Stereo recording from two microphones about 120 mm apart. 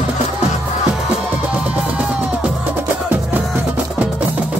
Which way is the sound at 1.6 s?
10° right (ahead or behind).